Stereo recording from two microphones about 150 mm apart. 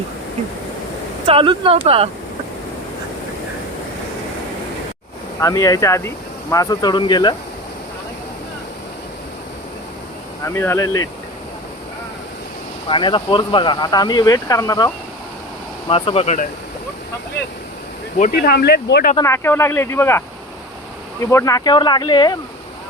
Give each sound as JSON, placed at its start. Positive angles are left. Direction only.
{"t": 1.3, "sound": "speech", "side_deg": -35}
{"t": 5.4, "sound": "speech", "side_deg": 20}
{"t": 10.4, "sound": "speech", "side_deg": 20}
{"t": 12.9, "sound": "speech", "side_deg": 35}
{"t": 15.9, "sound": "speech", "side_deg": 35}
{"t": 18.2, "sound": "speech", "side_deg": 65}
{"t": 19.1, "sound": "speech", "side_deg": 20}